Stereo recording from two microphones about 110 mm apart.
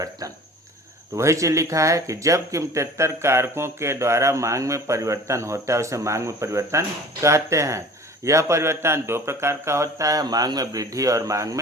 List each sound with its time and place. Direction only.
1.1 s speech: 30° right (ahead or behind)